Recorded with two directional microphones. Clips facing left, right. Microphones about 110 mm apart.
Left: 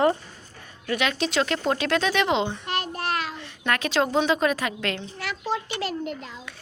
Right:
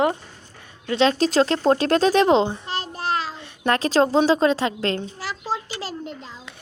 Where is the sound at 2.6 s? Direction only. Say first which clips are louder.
Right 1 dB; 30° right (ahead or behind).